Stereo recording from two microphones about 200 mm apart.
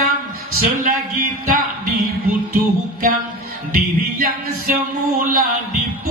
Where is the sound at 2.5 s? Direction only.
45° right (ahead or behind).